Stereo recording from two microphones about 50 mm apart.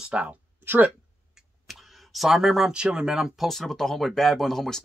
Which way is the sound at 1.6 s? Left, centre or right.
Centre.